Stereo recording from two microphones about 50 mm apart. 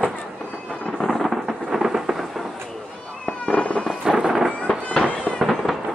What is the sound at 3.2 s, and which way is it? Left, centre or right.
Fireworks, left.